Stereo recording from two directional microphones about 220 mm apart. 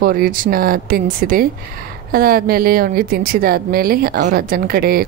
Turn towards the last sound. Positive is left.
turn(degrees=-45)  # may be behind; listen again after turning